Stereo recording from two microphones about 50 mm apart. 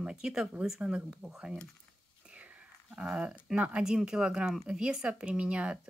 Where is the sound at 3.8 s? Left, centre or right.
Centre.